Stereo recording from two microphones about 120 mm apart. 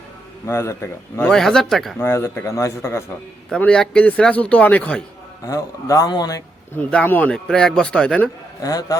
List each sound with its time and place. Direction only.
0.4 s speech: 20° left (ahead or behind)
1.3 s speech: 5° left (ahead or behind)
2.0 s speech: 20° left (ahead or behind)
3.6 s speech: 10° left (ahead or behind)
5.5 s speech: 30° left (ahead or behind)
6.9 s speech: 15° left (ahead or behind)
8.6 s speech: 30° left (ahead or behind)